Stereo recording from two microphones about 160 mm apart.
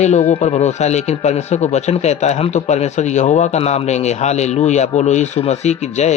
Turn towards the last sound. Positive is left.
turn(degrees=45)  # may be behind; listen again after turning